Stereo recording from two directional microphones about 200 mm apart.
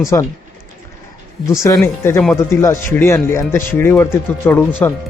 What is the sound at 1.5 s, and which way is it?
Speech, 15° left (ahead or behind).